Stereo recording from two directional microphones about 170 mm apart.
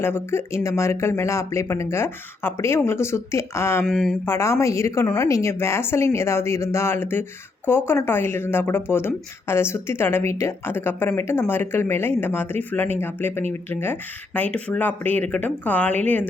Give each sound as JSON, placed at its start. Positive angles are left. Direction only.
{"t": 0.0, "sound": "a woman's voice", "side_deg": 15}
{"t": 3.8, "sound": "mantra", "side_deg": 0}
{"t": 4.3, "sound": "a woman's voice", "side_deg": 15}